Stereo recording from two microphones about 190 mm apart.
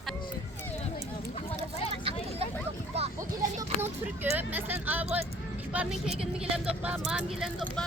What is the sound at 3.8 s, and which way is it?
Speech, 10° right (ahead or behind).